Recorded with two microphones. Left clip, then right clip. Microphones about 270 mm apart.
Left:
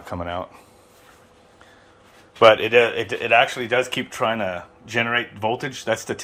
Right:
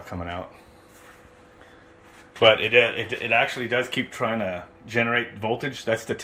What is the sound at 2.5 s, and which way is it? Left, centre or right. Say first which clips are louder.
Speech: left 2 dB; centre.